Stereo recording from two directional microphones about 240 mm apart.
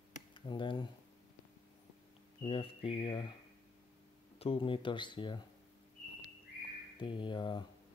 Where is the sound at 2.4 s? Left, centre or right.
Left.